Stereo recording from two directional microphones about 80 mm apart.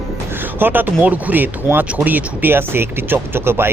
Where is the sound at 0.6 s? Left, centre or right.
Right.